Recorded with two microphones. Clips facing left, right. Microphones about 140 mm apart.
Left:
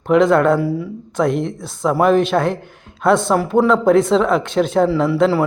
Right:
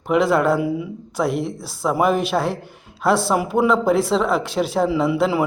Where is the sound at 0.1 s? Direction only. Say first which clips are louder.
Left 4 dB; 5° right (ahead or behind).